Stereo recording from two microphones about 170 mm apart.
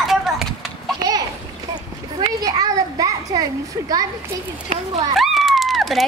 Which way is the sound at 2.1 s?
20° right (ahead or behind).